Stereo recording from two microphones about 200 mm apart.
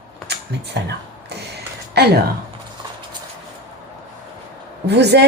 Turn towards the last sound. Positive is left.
turn(degrees=-55)  # may be behind; listen again after turning